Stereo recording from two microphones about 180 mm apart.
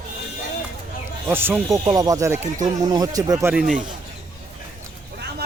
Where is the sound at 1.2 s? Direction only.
10° right (ahead or behind).